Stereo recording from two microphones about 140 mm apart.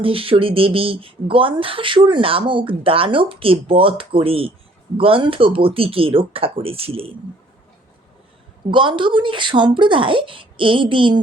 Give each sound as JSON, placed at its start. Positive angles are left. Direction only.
{"t": 0.0, "sound": "speech", "side_deg": -40}
{"t": 8.7, "sound": "speech", "side_deg": -35}